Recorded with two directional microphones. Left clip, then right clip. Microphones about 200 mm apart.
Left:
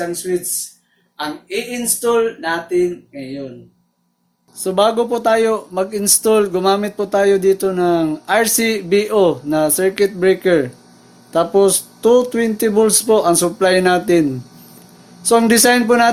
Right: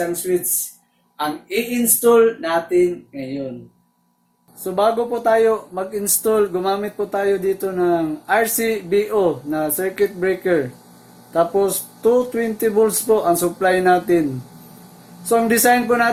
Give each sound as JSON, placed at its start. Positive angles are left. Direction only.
{"t": 1.5, "sound": "speech", "side_deg": 0}
{"t": 4.6, "sound": "speech", "side_deg": 40}
{"t": 15.3, "sound": "speech", "side_deg": 50}